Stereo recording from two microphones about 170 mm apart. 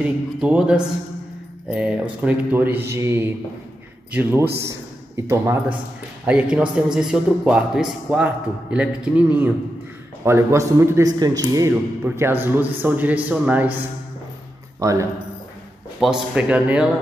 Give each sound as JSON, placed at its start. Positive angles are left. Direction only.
{"t": 0.0, "sound": "a man's voice", "side_deg": -5}
{"t": 14.8, "sound": "speech", "side_deg": -20}
{"t": 16.0, "sound": "a man's voice", "side_deg": 0}